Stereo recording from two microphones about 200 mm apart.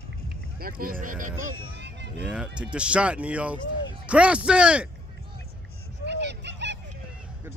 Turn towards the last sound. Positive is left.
turn(degrees=-60)  # may be behind; listen again after turning